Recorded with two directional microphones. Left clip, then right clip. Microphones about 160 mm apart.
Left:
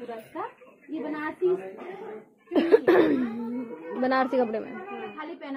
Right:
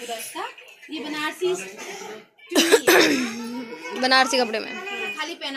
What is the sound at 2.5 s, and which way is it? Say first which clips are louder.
Cough: right 3 dB; 10° right (ahead or behind).